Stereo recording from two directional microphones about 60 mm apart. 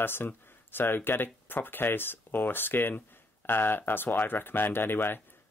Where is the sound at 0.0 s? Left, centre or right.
Left.